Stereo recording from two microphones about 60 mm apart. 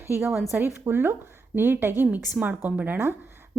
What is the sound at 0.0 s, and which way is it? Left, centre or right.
A woman's voice, right.